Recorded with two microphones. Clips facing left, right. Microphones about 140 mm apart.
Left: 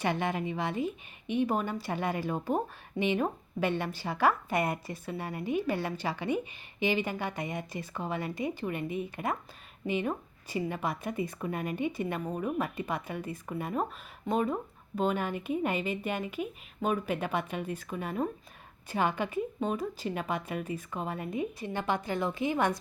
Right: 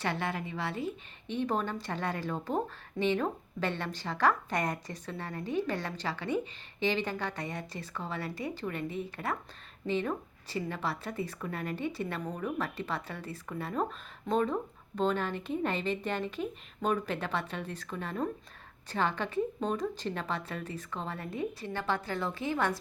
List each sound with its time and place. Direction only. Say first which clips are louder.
0.0 s a woman's voice: left 3 dB; 15° left (ahead or behind)